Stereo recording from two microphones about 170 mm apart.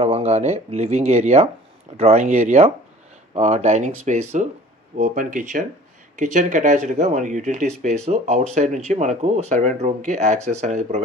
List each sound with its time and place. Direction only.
0.0 s speech: 35° right (ahead or behind)